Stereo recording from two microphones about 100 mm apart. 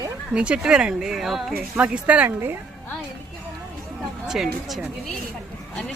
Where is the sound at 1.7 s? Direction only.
15° right (ahead or behind).